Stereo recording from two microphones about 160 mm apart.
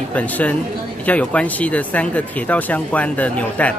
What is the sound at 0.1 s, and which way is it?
Speech, 10° left (ahead or behind).